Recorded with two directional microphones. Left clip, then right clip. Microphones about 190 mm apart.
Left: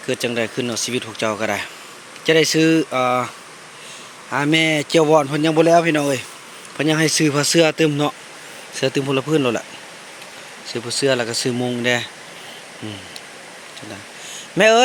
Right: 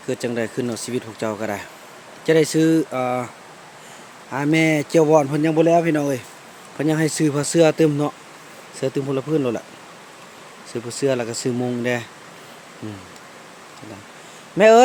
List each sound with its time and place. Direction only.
0.1 s speech: 15° right (ahead or behind)
4.3 s speech: 10° right (ahead or behind)
11.0 s speech: 10° right (ahead or behind)